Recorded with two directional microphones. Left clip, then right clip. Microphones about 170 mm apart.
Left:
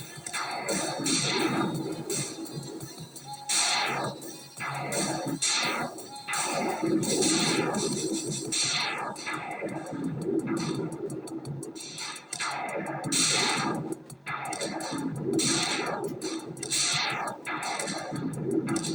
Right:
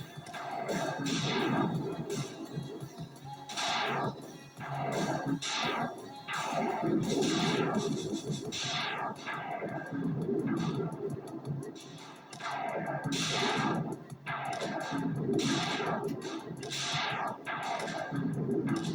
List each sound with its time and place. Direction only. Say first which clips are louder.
0.3 s music: left 4 dB; 35° left (ahead or behind)
3.5 s music: left 5 dB; 35° left (ahead or behind)
10.4 s a sound: left 3 dB; 35° left (ahead or behind)
12.4 s music: left 3 dB; 35° left (ahead or behind)
18.6 s vehicle: left 4 dB; 35° left (ahead or behind)